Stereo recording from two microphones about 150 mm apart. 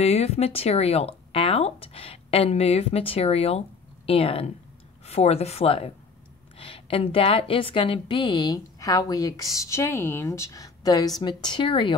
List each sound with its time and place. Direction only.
0.0 s a woman's voice: 45° left (ahead or behind)